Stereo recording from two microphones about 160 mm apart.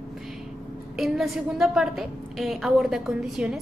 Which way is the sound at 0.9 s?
Centre (ahead or behind).